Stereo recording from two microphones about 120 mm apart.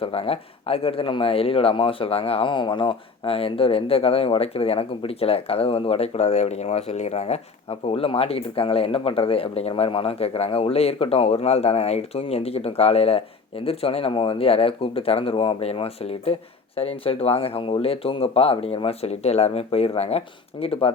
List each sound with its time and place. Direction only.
0.0 s speech: 50° left (ahead or behind)